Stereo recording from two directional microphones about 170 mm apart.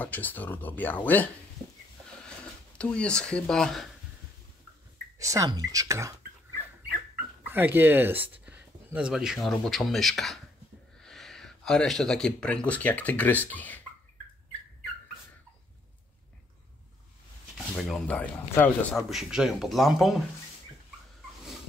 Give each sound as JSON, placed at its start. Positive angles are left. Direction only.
{"t": 0.0, "sound": "speech", "side_deg": 10}
{"t": 2.8, "sound": "speech", "side_deg": 5}
{"t": 5.2, "sound": "speech", "side_deg": -20}
{"t": 7.4, "sound": "speech", "side_deg": -10}
{"t": 17.6, "sound": "speech", "side_deg": 0}
{"t": 18.9, "sound": "speech", "side_deg": 0}